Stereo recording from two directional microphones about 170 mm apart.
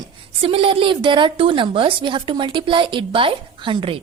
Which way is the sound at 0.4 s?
35° right (ahead or behind).